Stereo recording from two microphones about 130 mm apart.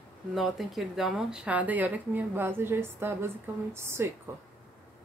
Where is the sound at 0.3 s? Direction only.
Centre (ahead or behind); by 4.1 s 20° right (ahead or behind).